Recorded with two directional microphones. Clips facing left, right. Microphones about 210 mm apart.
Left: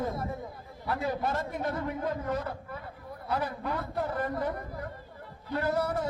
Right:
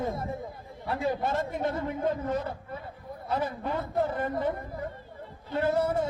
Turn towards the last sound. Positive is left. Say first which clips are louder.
# right 3 dB
turn(degrees=-25)  # may be behind; listen again after turning